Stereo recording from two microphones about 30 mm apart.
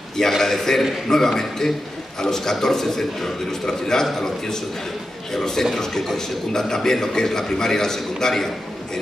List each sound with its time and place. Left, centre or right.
0.4 s a man's voice: centre
5.6 s a man's voice: centre